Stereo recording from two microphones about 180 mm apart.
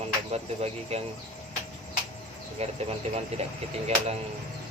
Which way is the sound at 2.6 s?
35° right (ahead or behind).